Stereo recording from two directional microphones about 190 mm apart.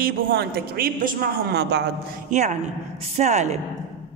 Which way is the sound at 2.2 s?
40° right (ahead or behind).